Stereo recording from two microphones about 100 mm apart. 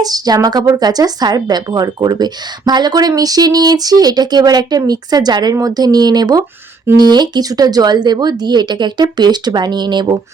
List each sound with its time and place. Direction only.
0.0 s speech: 40° right (ahead or behind)